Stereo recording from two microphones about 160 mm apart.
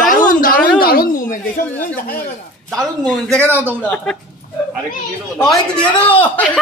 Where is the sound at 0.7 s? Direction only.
65° left (ahead or behind).